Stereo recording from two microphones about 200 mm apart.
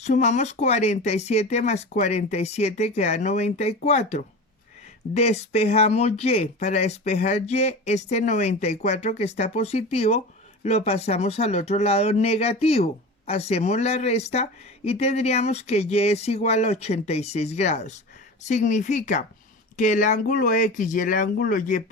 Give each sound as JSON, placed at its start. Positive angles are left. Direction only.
{"t": 0.0, "sound": "speech", "side_deg": 35}